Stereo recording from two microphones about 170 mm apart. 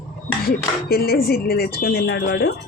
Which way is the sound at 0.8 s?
65° left (ahead or behind).